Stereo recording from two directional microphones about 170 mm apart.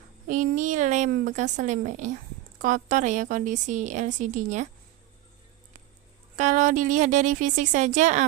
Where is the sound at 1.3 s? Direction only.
45° right (ahead or behind).